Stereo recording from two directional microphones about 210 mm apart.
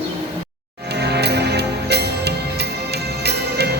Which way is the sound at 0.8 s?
55° right (ahead or behind).